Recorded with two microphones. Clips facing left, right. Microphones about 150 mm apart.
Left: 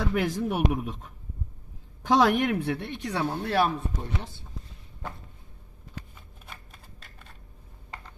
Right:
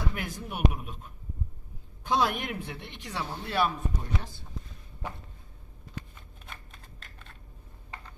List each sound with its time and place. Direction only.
0.0 s speech: 90° left
2.0 s a woman's voice: 90° left; by 3.3 s 55° left (ahead or behind)
3.4 s speech: 35° left (ahead or behind)
6.4 s shuffling cards: 5° left (ahead or behind)